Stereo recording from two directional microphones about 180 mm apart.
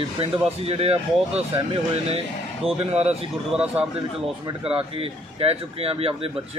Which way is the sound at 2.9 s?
35° right (ahead or behind).